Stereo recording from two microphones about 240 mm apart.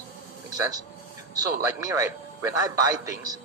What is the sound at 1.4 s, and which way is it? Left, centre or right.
Speech, centre.